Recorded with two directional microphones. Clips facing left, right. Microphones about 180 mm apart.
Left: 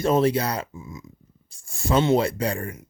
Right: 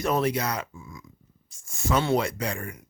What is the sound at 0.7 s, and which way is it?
Speech, 20° left (ahead or behind).